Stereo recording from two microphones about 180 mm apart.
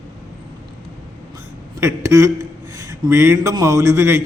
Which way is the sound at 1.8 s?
15° right (ahead or behind).